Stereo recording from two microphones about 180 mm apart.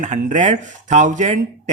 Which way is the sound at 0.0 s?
45° right (ahead or behind).